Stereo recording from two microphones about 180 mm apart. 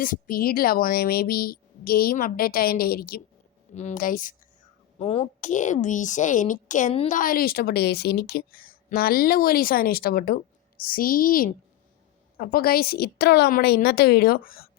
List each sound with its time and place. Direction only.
0.0 s a woman's voice: 50° left (ahead or behind)
3.8 s a woman's voice: 45° left (ahead or behind)
4.9 s a woman's voice: 35° left (ahead or behind)
7.2 s a woman's voice: 50° left (ahead or behind)